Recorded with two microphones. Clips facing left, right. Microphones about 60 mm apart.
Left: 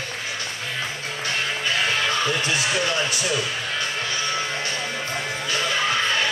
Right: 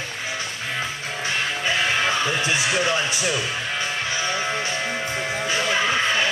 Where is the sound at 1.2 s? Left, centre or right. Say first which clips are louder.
Right 1 dB; right.